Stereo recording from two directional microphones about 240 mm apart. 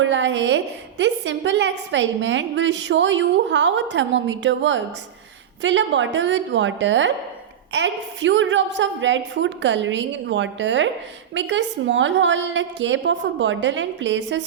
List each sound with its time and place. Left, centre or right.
0.0 s a woman's voice: right